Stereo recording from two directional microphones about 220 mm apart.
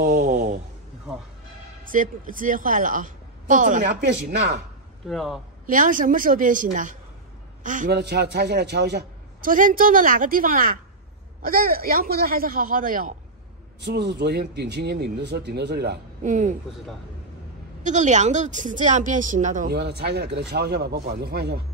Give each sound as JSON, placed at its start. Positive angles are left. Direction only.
{"t": 0.0, "sound": "a sound", "side_deg": -40}
{"t": 1.9, "sound": "a woman's voice", "side_deg": -40}
{"t": 5.0, "sound": "speech", "side_deg": 0}
{"t": 5.7, "sound": "a woman's voice", "side_deg": -40}
{"t": 13.7, "sound": "speech", "side_deg": -50}
{"t": 17.8, "sound": "a woman's voice", "side_deg": -35}